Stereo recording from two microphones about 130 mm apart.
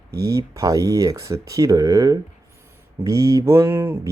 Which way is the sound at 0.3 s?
25° right (ahead or behind).